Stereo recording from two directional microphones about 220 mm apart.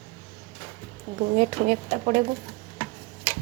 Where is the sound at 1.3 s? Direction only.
40° right (ahead or behind).